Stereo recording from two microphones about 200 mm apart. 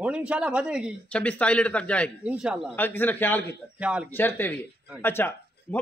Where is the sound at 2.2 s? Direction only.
5° right (ahead or behind).